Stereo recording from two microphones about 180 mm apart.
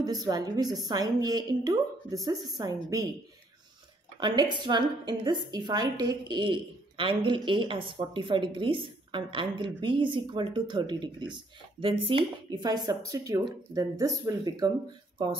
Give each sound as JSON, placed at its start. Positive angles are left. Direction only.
{"t": 0.0, "sound": "a woman's voice", "side_deg": -20}
{"t": 4.2, "sound": "a woman's voice", "side_deg": -25}